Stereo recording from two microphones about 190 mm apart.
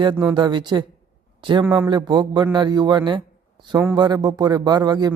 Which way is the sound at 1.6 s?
10° right (ahead or behind).